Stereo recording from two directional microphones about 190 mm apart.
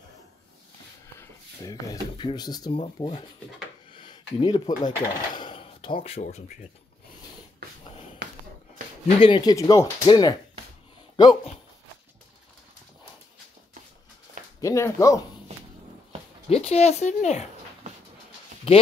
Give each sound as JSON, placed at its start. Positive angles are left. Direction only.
{"t": 1.6, "sound": "speech", "side_deg": 20}
{"t": 3.9, "sound": "a sound", "side_deg": 25}
{"t": 4.4, "sound": "speech", "side_deg": 25}
{"t": 8.2, "sound": "a sound", "side_deg": -65}
{"t": 9.0, "sound": "speech", "side_deg": 25}
{"t": 14.6, "sound": "speech", "side_deg": 15}
{"t": 16.4, "sound": "speech", "side_deg": 30}